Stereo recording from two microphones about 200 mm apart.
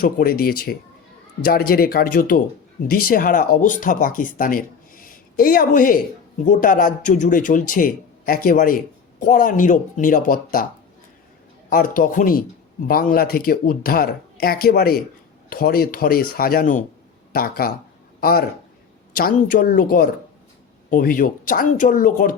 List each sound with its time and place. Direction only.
0.0 s speech: 45° left (ahead or behind)
11.7 s a man's voice: 45° left (ahead or behind)